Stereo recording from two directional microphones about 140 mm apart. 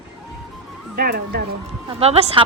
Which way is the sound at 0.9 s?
90° right.